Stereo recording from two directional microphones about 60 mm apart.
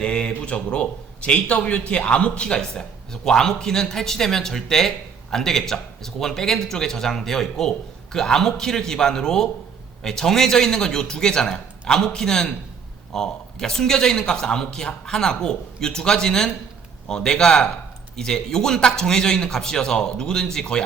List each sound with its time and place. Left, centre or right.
0.0 s a man's voice: centre